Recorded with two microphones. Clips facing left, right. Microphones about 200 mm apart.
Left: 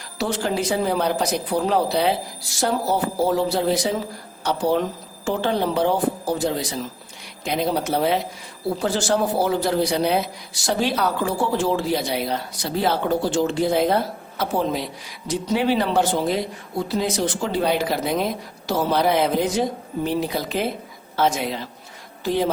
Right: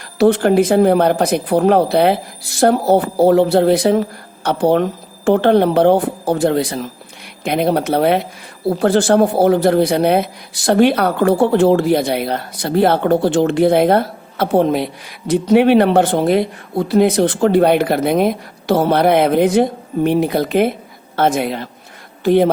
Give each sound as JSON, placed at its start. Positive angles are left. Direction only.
{"t": 0.2, "sound": "speech", "side_deg": -55}